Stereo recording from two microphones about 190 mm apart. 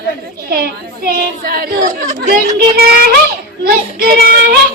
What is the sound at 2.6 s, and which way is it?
A woman's voice, 55° right (ahead or behind).